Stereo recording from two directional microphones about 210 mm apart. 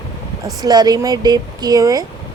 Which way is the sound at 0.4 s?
20° right (ahead or behind).